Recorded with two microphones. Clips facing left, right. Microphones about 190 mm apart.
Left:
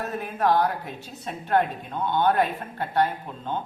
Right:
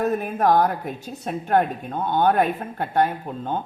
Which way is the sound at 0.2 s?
50° right (ahead or behind).